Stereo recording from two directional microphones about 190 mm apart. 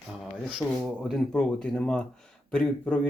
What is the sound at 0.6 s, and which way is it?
Speech, 15° left (ahead or behind).